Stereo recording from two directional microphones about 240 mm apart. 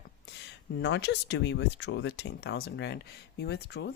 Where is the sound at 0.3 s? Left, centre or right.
Left.